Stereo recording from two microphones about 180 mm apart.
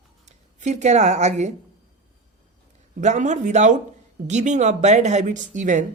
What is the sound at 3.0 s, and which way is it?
Speech, 40° right (ahead or behind).